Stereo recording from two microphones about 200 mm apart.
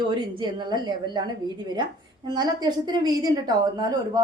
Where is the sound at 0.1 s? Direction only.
20° right (ahead or behind).